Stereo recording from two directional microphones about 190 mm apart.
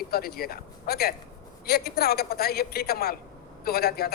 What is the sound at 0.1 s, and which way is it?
A man's voice, 55° left (ahead or behind).